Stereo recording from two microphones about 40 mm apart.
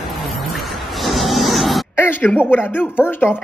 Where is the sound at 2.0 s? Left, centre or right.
Left.